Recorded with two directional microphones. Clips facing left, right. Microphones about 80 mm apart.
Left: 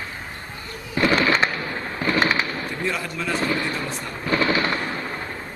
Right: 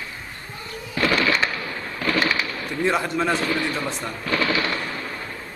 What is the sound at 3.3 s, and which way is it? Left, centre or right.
Speech, left.